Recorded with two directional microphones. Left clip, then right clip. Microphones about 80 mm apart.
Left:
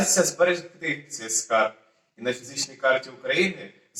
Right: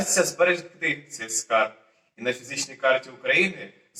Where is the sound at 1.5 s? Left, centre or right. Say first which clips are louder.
Even; centre.